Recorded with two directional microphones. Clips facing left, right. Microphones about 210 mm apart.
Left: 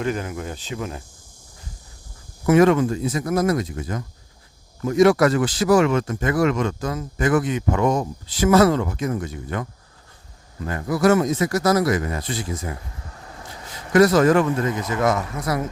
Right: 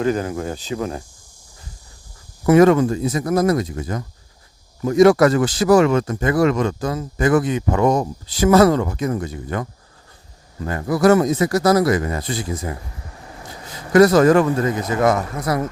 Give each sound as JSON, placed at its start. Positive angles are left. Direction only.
{"t": 0.0, "sound": "speech", "side_deg": -35}
{"t": 2.5, "sound": "speech", "side_deg": -40}
{"t": 10.7, "sound": "speech", "side_deg": -35}
{"t": 13.0, "sound": "vehicle", "side_deg": -20}
{"t": 13.9, "sound": "speech", "side_deg": -40}